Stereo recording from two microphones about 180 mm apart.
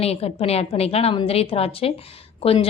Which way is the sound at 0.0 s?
35° left (ahead or behind).